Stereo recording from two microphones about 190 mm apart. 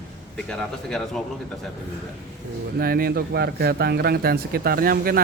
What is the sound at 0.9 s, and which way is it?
Speech, 5° left (ahead or behind).